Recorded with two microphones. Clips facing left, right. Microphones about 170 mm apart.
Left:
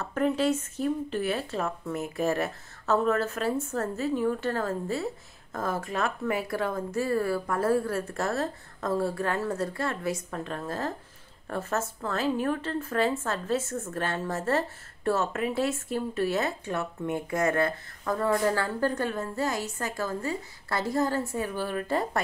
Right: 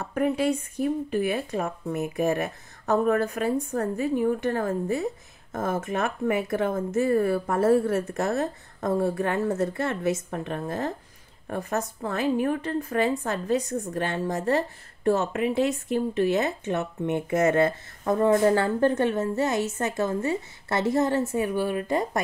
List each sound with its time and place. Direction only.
0.0 s speech: 10° right (ahead or behind)